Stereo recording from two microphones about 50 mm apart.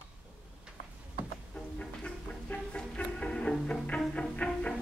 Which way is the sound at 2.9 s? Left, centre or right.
Left.